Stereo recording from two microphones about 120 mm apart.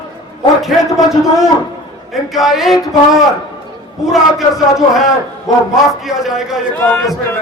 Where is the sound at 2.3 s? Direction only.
Centre (ahead or behind).